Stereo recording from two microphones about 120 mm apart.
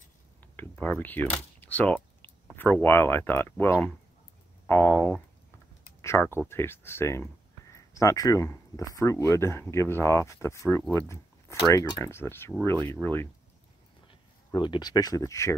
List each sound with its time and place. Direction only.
0.4 s a sound: 15° left (ahead or behind)
2.5 s speech: 15° left (ahead or behind)
4.9 s speech: 5° left (ahead or behind)
5.9 s speech: 20° left (ahead or behind)
7.7 s a sound: 25° left (ahead or behind)
8.5 s speech: 25° left (ahead or behind)
14.0 s speech: 40° left (ahead or behind); by 15.5 s 25° left (ahead or behind)